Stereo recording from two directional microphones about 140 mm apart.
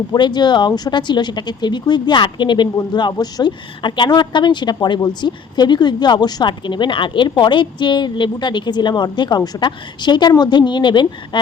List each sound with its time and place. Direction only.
0.1 s a woman's voice: 30° left (ahead or behind)